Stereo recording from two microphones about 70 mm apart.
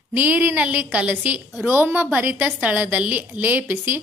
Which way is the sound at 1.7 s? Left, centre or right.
Right.